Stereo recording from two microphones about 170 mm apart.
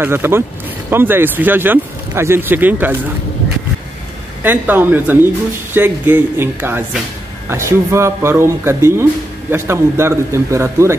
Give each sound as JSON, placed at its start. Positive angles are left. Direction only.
{"t": 0.0, "sound": "speech", "side_deg": -15}
{"t": 4.4, "sound": "speech", "side_deg": -10}